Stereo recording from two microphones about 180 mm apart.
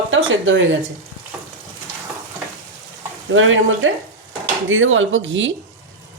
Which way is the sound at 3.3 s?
90° right.